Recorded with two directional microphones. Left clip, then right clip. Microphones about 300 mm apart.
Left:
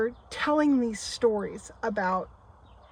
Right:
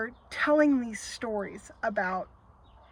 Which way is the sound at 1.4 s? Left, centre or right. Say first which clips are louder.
Left 1 dB; left.